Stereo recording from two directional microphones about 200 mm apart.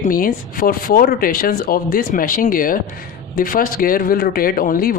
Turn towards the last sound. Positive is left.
turn(degrees=45)  # may be behind; listen again after turning